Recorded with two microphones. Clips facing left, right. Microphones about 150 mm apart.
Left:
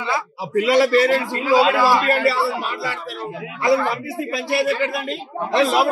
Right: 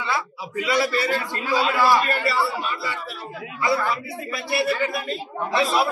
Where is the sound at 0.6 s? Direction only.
90° left.